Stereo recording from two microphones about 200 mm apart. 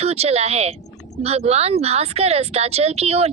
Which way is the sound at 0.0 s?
30° right (ahead or behind).